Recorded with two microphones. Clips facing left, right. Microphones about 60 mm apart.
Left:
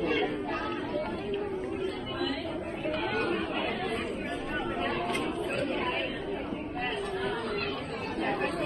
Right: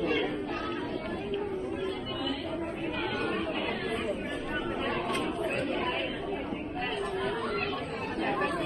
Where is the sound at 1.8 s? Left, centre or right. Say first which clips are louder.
Left 1 dB; left.